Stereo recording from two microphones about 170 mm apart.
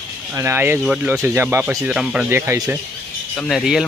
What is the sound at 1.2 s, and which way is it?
Speech, 15° right (ahead or behind).